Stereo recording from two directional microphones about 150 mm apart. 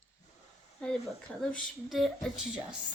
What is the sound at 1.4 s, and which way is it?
Speech, 5° left (ahead or behind).